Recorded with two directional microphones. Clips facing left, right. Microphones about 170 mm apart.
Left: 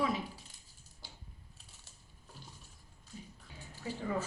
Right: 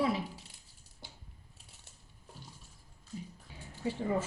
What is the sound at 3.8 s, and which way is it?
Speech, 25° right (ahead or behind).